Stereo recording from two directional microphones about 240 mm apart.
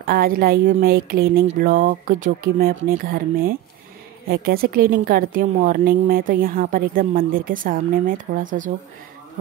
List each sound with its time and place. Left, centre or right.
0.0 s a woman's voice: right